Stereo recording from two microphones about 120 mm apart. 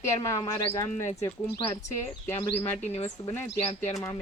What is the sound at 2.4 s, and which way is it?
Speech, 60° left (ahead or behind).